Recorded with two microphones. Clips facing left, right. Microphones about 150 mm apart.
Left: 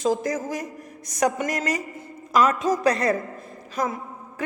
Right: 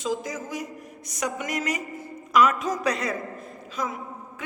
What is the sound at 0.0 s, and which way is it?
A woman's voice, 45° left (ahead or behind).